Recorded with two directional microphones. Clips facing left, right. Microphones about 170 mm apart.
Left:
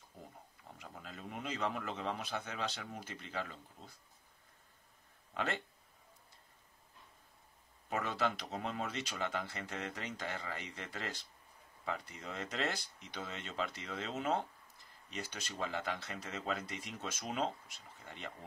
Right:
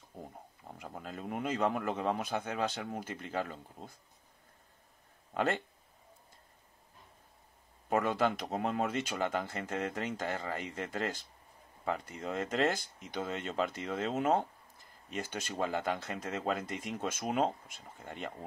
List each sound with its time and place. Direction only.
0.1 s a sound: 50° right (ahead or behind)
0.7 s speech: 45° right (ahead or behind)
5.3 s speech: 45° right (ahead or behind)
7.9 s speech: 50° right (ahead or behind)